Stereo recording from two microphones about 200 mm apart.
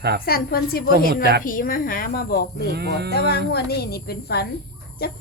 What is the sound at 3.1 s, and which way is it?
Speech, 50° left (ahead or behind).